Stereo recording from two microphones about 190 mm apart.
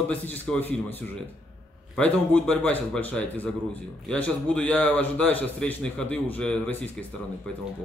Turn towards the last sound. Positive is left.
turn(degrees=5)  # may be behind; listen again after turning